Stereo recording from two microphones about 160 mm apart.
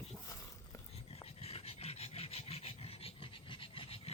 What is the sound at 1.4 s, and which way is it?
Filing, 40° left (ahead or behind).